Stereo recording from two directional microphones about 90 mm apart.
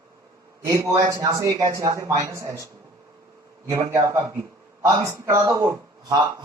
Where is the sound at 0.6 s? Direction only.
40° right (ahead or behind).